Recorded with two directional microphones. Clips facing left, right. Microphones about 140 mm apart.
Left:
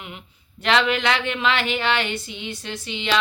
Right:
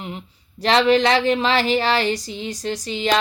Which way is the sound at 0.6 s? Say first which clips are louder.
Right 5 dB; 35° right (ahead or behind).